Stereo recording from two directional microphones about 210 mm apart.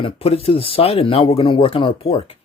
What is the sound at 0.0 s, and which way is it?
Speech, 30° left (ahead or behind).